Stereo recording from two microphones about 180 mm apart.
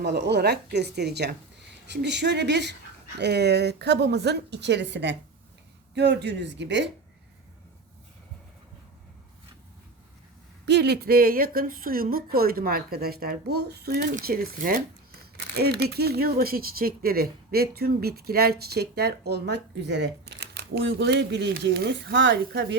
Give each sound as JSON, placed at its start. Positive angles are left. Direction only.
{"t": 0.0, "sound": "a woman's voice", "side_deg": -70}
{"t": 10.7, "sound": "speech", "side_deg": -65}